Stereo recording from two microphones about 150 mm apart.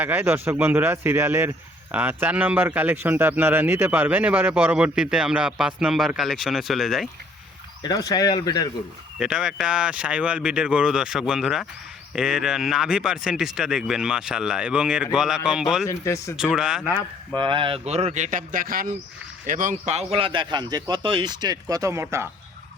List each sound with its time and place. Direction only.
0.0 s speech: 10° right (ahead or behind)
7.8 s speech: 25° left (ahead or behind)
9.1 s speech: 5° right (ahead or behind)
15.9 s speech: 20° left (ahead or behind)
16.4 s speech: 5° right (ahead or behind)
17.3 s speech: 35° right (ahead or behind); by 18.9 s 70° right (ahead or behind)
19.5 s speech: 60° right (ahead or behind); by 22.3 s 15° right (ahead or behind)